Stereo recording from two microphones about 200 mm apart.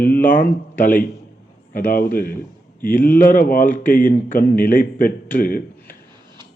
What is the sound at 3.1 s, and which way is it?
A man's voice, 45° left (ahead or behind).